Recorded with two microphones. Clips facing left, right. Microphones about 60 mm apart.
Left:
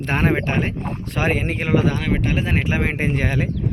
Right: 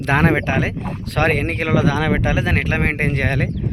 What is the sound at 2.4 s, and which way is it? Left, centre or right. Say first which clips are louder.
Speech: right 2 dB; right.